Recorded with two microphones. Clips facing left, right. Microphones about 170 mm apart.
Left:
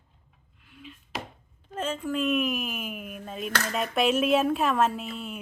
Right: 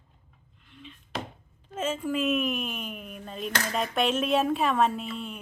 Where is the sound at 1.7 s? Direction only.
5° right (ahead or behind).